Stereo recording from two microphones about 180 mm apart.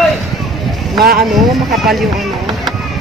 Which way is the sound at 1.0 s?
60° right (ahead or behind).